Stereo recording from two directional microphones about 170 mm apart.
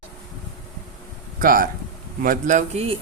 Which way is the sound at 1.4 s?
55° right (ahead or behind).